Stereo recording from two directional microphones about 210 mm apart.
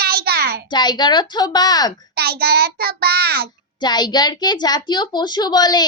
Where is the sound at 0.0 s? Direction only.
45° right (ahead or behind).